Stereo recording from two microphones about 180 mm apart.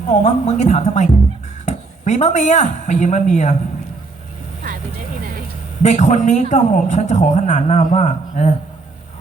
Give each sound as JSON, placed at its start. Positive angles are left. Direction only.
{"t": 0.1, "sound": "speech", "side_deg": 40}
{"t": 4.6, "sound": "vehicle", "side_deg": -50}
{"t": 5.8, "sound": "speech", "side_deg": 40}